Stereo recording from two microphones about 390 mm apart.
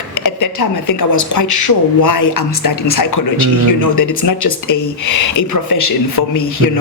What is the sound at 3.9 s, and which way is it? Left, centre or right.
Speech, left.